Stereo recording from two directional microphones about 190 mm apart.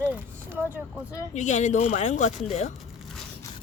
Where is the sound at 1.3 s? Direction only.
40° left (ahead or behind).